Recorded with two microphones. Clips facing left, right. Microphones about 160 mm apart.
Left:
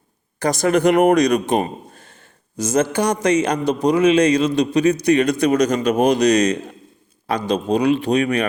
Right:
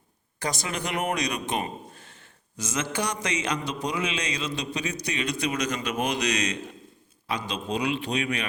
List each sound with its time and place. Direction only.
0.3 s a man's voice: 45° left (ahead or behind)